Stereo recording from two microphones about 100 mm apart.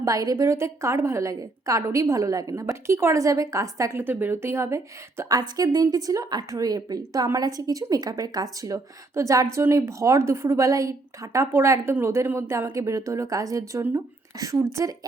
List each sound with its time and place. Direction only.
0.0 s a woman's voice: 35° right (ahead or behind)
4.0 s a woman's voice: 20° right (ahead or behind)
5.4 s a woman's voice: 40° right (ahead or behind)